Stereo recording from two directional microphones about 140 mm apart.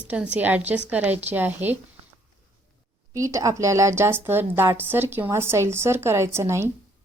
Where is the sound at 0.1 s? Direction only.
10° right (ahead or behind).